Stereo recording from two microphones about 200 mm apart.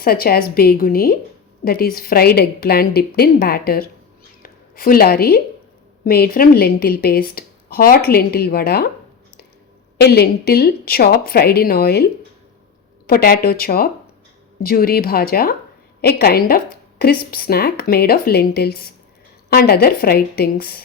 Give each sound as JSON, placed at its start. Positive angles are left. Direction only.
{"t": 0.0, "sound": "a woman's voice", "side_deg": 50}
{"t": 10.0, "sound": "a woman's voice", "side_deg": 55}